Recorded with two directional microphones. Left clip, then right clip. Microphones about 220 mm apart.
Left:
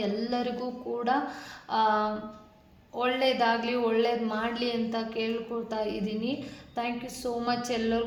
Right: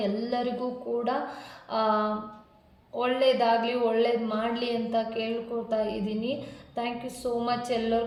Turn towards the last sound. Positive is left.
turn(degrees=35)  # may be behind; listen again after turning